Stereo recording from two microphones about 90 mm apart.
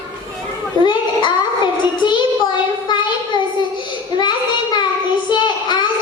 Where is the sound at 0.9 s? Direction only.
60° left (ahead or behind).